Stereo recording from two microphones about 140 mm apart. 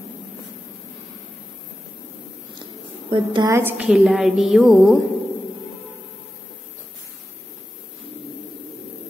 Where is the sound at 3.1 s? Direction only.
35° right (ahead or behind).